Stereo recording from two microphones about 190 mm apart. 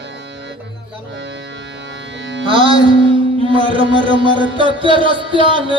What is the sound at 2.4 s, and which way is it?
Speech, 25° right (ahead or behind).